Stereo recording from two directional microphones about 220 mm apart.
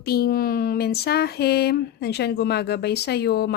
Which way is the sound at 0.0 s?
45° left (ahead or behind).